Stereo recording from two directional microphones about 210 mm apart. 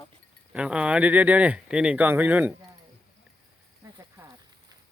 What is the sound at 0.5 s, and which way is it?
Speech, 5° right (ahead or behind).